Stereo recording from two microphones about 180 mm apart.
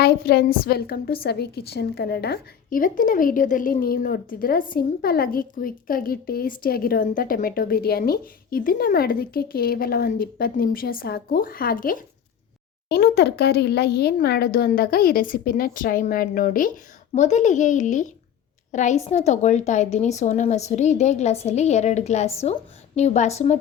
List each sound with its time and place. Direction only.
0.0 s a woman's voice: 60° left (ahead or behind)
12.9 s a woman's voice: 65° left (ahead or behind); by 23.6 s 40° left (ahead or behind)